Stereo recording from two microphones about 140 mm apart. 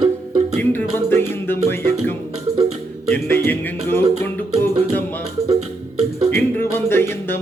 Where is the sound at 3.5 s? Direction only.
15° left (ahead or behind).